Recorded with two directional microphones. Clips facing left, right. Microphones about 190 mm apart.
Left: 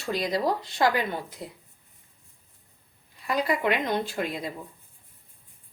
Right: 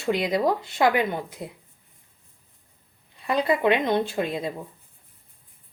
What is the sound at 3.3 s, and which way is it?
A woman's voice, 25° right (ahead or behind).